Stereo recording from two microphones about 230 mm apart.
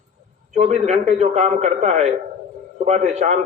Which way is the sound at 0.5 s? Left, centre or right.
Right.